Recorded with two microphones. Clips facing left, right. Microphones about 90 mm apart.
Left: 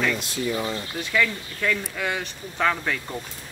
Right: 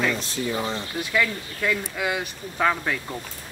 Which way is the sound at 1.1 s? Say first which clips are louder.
Left 1 dB; 10° right (ahead or behind).